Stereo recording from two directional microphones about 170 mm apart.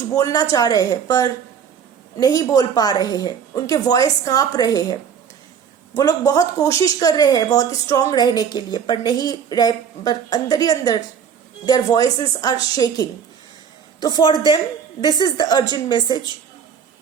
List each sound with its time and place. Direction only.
0.1 s speech: 20° left (ahead or behind)